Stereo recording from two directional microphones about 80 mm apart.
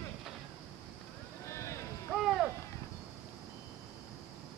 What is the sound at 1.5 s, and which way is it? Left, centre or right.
Boat, left.